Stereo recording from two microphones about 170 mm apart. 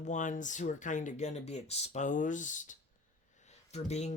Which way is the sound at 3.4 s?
40° left (ahead or behind).